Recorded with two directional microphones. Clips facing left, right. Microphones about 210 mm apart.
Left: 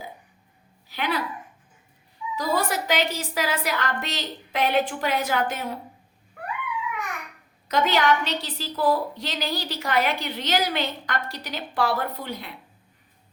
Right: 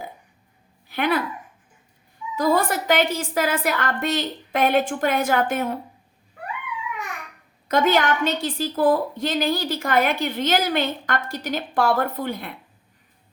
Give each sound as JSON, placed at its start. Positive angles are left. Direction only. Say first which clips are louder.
{"t": 0.9, "sound": "speech", "louder": "right 5 dB", "side_deg": -55}
{"t": 2.3, "sound": "a woman's voice", "louder": "right 5 dB", "side_deg": -50}
{"t": 7.7, "sound": "a woman's voice", "louder": "right 2 dB", "side_deg": -50}